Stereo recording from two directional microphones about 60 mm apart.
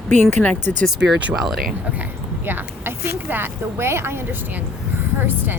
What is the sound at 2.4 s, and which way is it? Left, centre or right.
Speech, right.